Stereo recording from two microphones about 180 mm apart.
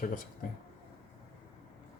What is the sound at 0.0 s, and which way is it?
Speech, 50° left (ahead or behind).